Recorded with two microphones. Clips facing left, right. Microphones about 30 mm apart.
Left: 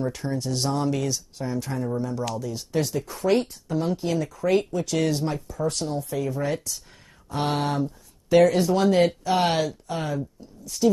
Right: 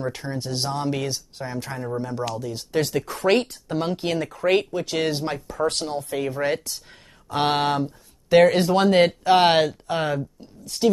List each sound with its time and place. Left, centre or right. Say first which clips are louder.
0.0 s speech: left 1 dB; right
2.9 s speech: right 3 dB; right
5.3 s speech: right 3 dB; right